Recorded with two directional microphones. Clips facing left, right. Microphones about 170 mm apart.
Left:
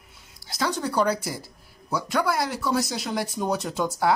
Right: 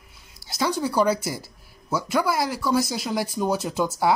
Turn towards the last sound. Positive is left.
turn(degrees=-5)  # may be behind; listen again after turning